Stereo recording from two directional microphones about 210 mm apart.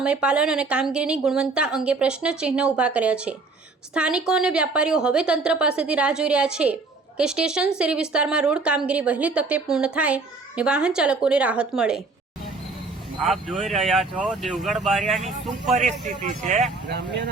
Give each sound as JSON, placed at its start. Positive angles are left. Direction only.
{"t": 0.0, "sound": "a woman's voice", "side_deg": -5}
{"t": 13.2, "sound": "a woman's voice", "side_deg": 0}
{"t": 16.0, "sound": "speech", "side_deg": -35}